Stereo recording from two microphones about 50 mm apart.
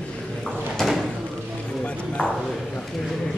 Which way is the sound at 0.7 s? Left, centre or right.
Centre.